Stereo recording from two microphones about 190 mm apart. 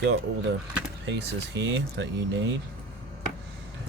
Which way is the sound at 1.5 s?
65° right (ahead or behind).